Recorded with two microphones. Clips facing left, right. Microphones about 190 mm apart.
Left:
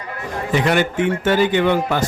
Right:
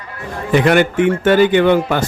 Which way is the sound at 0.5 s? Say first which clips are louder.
Right 5 dB; 60° right (ahead or behind).